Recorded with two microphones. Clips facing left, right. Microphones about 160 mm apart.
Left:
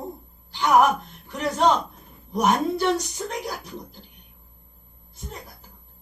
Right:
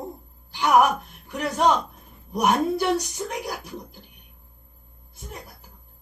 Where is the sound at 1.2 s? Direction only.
10° right (ahead or behind).